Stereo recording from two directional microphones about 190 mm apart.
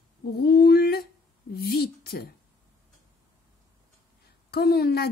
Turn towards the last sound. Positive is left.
turn(degrees=55)  # may be behind; listen again after turning